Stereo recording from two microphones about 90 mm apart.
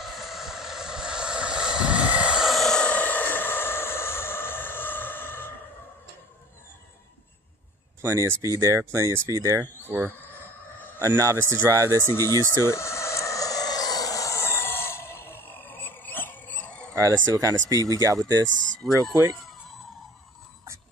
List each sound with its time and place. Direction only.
0.0 s vehicle: 5° right (ahead or behind); by 5.5 s 25° left (ahead or behind)
8.0 s speech: 30° right (ahead or behind)
9.8 s speech: 20° right (ahead or behind)
11.0 s speech: 35° right (ahead or behind)
12.1 s speech: 30° left (ahead or behind)
12.6 s chicken: 30° left (ahead or behind); by 16.9 s 15° left (ahead or behind)
16.9 s speech: 35° right (ahead or behind)
18.8 s speech: centre (ahead or behind)